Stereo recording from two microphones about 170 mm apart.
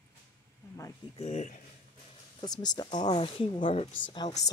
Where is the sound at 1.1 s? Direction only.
40° left (ahead or behind).